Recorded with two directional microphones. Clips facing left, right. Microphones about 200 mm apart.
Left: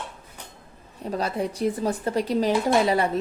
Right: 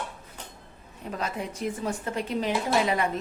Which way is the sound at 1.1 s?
35° left (ahead or behind).